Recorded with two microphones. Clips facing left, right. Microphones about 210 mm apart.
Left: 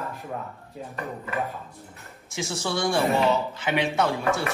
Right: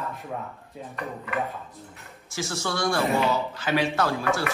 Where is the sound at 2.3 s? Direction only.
25° left (ahead or behind).